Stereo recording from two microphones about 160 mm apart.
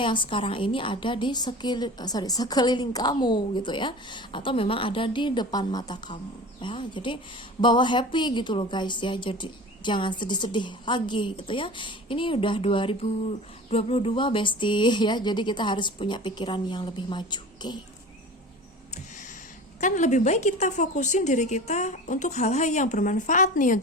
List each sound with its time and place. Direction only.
0.0 s a woman's voice: 30° left (ahead or behind)
19.8 s a woman's voice: 50° left (ahead or behind)